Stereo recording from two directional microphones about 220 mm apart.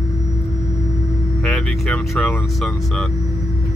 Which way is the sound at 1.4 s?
5° left (ahead or behind).